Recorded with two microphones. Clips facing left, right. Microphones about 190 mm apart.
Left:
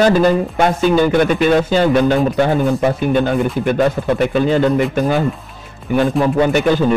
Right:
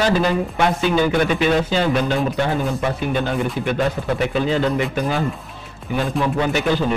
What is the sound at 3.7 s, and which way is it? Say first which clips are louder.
A man's voice: left 6 dB; 50° left (ahead or behind).